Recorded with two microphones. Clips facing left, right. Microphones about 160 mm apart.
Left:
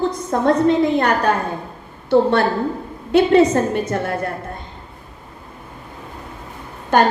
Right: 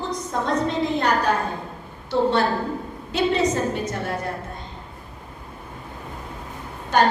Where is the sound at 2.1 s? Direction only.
55° left (ahead or behind).